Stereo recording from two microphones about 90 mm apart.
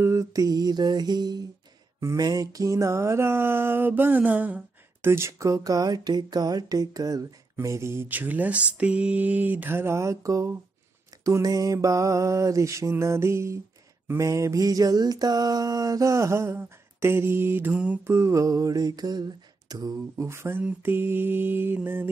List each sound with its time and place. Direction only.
0.0 s speech: 35° right (ahead or behind)
2.0 s mantra: 40° right (ahead or behind); by 5.1 s 15° right (ahead or behind)
5.1 s speech: 30° right (ahead or behind)
7.6 s mantra: 30° right (ahead or behind)
11.2 s a sound: 40° right (ahead or behind)
20.2 s mantra: 30° right (ahead or behind)